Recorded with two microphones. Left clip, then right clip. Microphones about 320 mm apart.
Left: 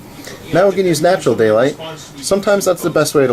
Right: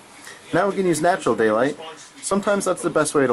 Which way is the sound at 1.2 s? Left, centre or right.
Right.